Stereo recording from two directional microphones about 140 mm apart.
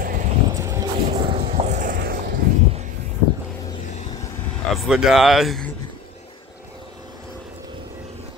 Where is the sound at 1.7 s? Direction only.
75° right (ahead or behind); by 2.3 s 90° right.